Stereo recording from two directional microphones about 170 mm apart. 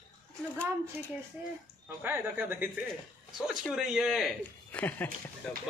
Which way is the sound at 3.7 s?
5° right (ahead or behind).